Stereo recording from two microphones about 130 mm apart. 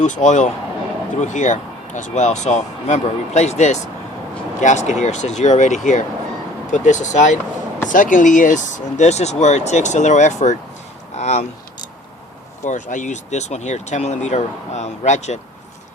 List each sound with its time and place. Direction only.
0.0 s speech: 65° left (ahead or behind)
7.9 s speech: 85° left; by 11.4 s 60° left (ahead or behind)
12.6 s speech: 70° left (ahead or behind)